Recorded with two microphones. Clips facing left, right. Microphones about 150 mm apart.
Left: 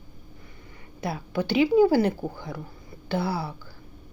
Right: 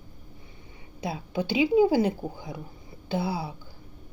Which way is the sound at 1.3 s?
20° right (ahead or behind).